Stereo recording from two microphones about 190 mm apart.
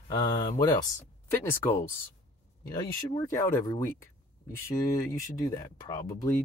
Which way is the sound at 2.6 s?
20° left (ahead or behind).